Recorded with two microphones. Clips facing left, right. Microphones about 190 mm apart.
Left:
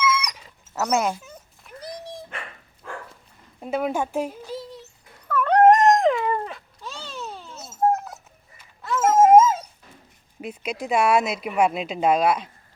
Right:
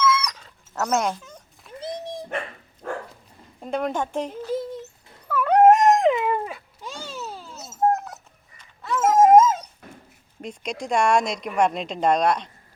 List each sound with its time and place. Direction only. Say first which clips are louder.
0.0 s dog: right 2 dB; 15° left (ahead or behind)
1.8 s dog: right 4 dB; 20° right (ahead or behind)
2.8 s dog: right 6 dB; 50° right (ahead or behind)
3.6 s speech: left 1 dB; 5° left (ahead or behind)
4.5 s a sound: right 7 dB; 50° right (ahead or behind)
5.3 s dog: even; 5° right (ahead or behind)
6.2 s cat: right 1 dB; 10° right (ahead or behind)
10.4 s speech: left 1 dB; 5° left (ahead or behind)